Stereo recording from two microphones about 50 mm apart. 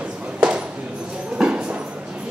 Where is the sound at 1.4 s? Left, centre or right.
Centre.